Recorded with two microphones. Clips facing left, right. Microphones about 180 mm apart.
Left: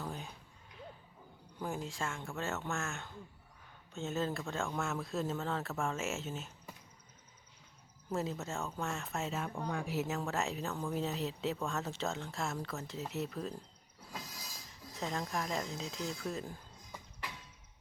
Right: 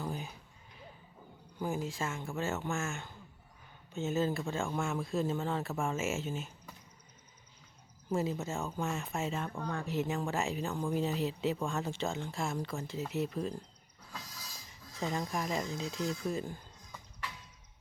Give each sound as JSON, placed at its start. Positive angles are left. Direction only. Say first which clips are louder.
{"t": 0.0, "sound": "a sound", "louder": "right 4 dB", "side_deg": 0}
{"t": 1.5, "sound": "speech", "louder": "right 4 dB", "side_deg": 0}
{"t": 8.1, "sound": "speech", "louder": "right 4 dB", "side_deg": 0}
{"t": 9.5, "sound": "speech", "louder": "right 1 dB", "side_deg": 15}
{"t": 14.7, "sound": "a sound", "louder": "right 3 dB", "side_deg": 0}
{"t": 15.2, "sound": "speech", "louder": "right 2 dB", "side_deg": 0}